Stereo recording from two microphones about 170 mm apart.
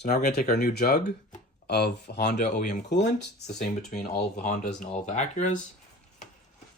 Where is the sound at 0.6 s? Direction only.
70° left (ahead or behind).